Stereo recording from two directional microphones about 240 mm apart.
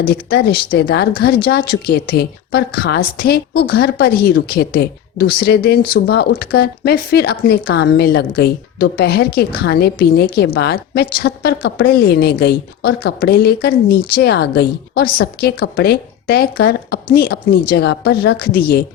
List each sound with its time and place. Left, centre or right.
0.0 s a woman's voice: left